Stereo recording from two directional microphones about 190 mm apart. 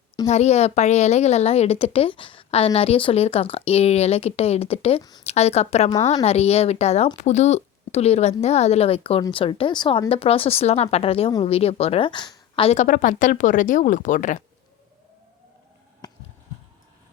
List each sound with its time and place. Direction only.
0.3 s speech: 35° left (ahead or behind)
16.0 s basketball bounce: 20° left (ahead or behind)